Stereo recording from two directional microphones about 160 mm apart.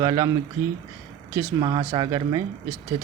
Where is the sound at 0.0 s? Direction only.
25° right (ahead or behind).